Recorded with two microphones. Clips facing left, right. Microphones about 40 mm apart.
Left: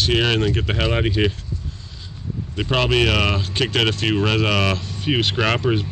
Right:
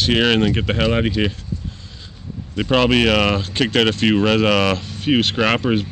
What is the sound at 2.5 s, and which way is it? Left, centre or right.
Speech, centre.